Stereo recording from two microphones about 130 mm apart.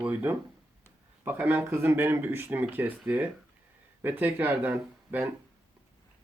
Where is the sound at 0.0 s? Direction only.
15° right (ahead or behind).